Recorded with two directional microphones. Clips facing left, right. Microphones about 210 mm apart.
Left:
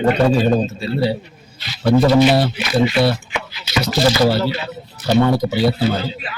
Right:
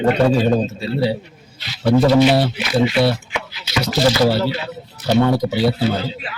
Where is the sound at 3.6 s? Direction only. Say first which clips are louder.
Even; 20° right (ahead or behind).